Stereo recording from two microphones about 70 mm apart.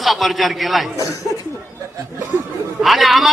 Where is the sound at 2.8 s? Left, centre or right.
Centre.